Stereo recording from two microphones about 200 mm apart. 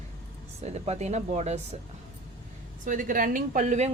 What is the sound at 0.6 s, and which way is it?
Speech, 30° right (ahead or behind).